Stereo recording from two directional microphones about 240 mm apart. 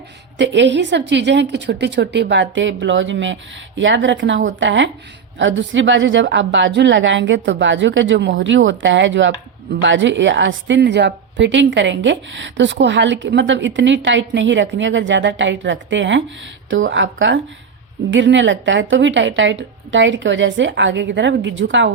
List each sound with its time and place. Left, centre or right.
0.3 s a woman's voice: right